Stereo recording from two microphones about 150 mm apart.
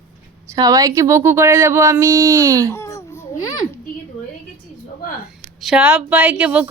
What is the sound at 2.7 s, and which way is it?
Babbling, 20° left (ahead or behind).